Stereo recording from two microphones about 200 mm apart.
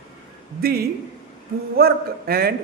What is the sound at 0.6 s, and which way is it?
A man's voice, 50° right (ahead or behind).